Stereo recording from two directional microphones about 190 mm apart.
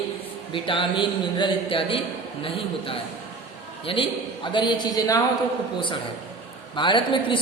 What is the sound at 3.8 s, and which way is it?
A man's voice, 30° left (ahead or behind).